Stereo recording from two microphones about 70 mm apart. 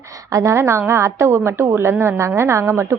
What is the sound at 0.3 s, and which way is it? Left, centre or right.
A woman's voice, right.